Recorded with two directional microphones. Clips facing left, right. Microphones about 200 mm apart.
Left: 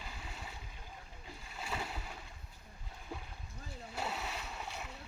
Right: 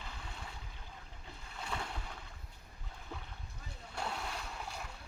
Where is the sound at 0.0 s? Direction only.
10° left (ahead or behind).